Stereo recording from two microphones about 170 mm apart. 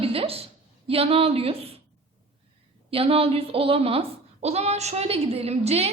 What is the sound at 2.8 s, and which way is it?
A woman's voice, 35° right (ahead or behind).